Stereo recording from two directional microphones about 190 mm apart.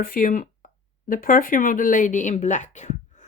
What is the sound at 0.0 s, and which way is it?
Speech, 45° left (ahead or behind).